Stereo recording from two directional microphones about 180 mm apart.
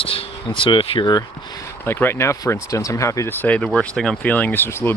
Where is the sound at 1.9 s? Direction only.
15° left (ahead or behind).